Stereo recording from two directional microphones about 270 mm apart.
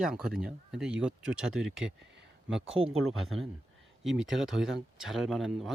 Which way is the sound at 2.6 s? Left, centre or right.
Right.